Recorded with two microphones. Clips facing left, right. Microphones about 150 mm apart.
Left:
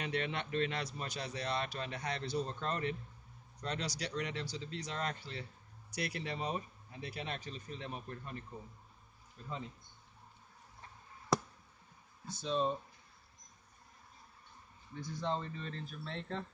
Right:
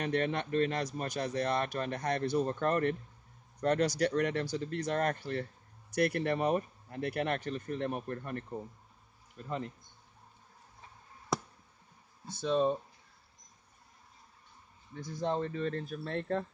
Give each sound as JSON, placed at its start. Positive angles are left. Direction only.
{"t": 0.0, "sound": "speech", "side_deg": -50}
{"t": 12.4, "sound": "speech", "side_deg": -60}
{"t": 15.0, "sound": "speech", "side_deg": -55}